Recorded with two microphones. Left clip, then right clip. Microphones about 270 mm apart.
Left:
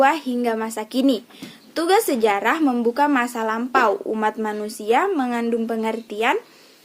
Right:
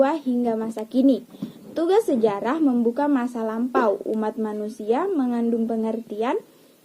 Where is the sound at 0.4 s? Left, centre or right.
Centre.